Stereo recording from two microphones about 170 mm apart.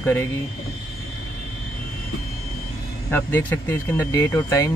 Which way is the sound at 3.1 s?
10° left (ahead or behind).